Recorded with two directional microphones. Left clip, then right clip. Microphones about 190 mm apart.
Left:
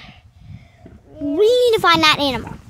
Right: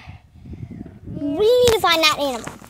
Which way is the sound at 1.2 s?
20° left (ahead or behind).